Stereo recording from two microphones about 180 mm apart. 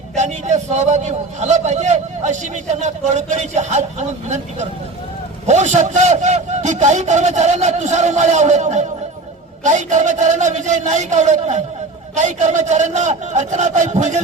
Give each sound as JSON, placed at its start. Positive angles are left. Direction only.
{"t": 0.2, "sound": "a man's voice", "side_deg": -40}
{"t": 5.5, "sound": "a man's voice", "side_deg": -40}